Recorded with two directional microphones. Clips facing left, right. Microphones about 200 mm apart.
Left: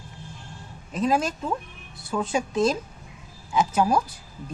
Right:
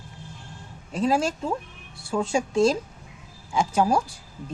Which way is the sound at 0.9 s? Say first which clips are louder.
Right 1 dB; 30° right (ahead or behind).